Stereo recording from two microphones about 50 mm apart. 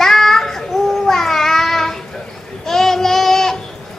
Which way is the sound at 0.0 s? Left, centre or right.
Centre.